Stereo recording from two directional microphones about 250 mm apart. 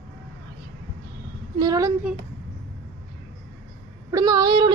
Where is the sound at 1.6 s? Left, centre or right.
Centre.